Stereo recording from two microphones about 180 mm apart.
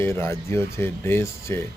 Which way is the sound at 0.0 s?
15° left (ahead or behind).